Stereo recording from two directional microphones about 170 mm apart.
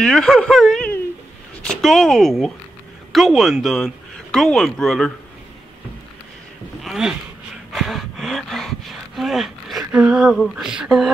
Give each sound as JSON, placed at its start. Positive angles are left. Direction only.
{"t": 0.0, "sound": "speech", "side_deg": 0}
{"t": 6.8, "sound": "speech", "side_deg": 0}